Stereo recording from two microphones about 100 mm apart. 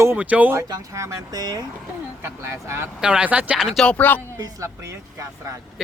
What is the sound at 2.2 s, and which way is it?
Speech, 25° right (ahead or behind).